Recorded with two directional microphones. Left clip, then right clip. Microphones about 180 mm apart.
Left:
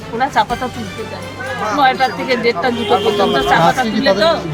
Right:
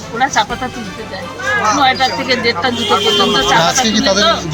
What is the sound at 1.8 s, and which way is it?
A man's voice, 10° left (ahead or behind).